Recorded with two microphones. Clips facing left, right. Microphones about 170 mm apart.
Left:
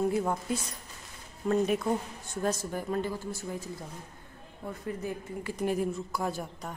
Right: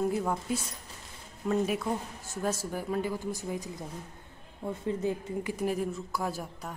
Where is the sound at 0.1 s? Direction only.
5° left (ahead or behind); by 3.7 s 15° right (ahead or behind).